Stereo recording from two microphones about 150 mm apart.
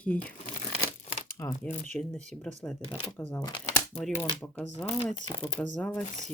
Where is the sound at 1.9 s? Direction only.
5° left (ahead or behind).